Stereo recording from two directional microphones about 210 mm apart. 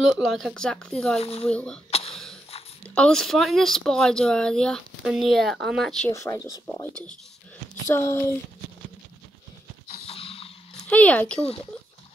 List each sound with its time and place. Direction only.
0.0 s speech: centre (ahead or behind)
1.2 s speech: 30° left (ahead or behind)
1.5 s speech: 5° left (ahead or behind)
1.9 s throat clearing: 30° left (ahead or behind)
2.8 s speech: 5° left (ahead or behind)
6.1 s speech: 15° left (ahead or behind)
10.0 s a sound: 25° left (ahead or behind)
10.7 s speech: 5° left (ahead or behind)